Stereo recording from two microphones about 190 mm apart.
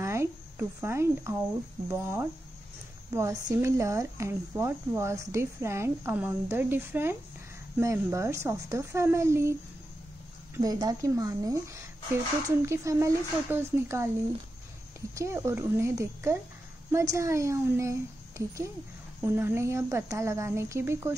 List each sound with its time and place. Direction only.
0.0 s cricket: 15° right (ahead or behind)
1.9 s speech: 15° right (ahead or behind)
19.2 s speech: 10° right (ahead or behind)